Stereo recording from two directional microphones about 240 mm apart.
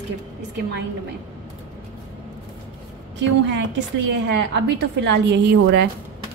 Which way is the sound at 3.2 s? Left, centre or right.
Right.